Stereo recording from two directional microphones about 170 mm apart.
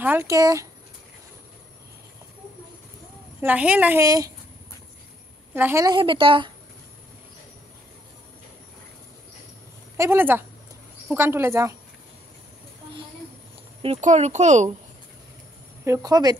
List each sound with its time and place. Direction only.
0.0 s a woman's voice: 15° right (ahead or behind)
3.3 s a woman's voice: 10° right (ahead or behind)
5.5 s a woman's voice: 15° right (ahead or behind)
5.9 s speech: 30° right (ahead or behind)
9.9 s a woman's voice: 15° right (ahead or behind)
13.8 s speech: 40° right (ahead or behind)
15.8 s speech: 20° right (ahead or behind)